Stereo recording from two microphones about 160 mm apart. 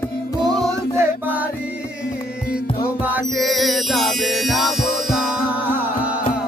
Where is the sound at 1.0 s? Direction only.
10° right (ahead or behind).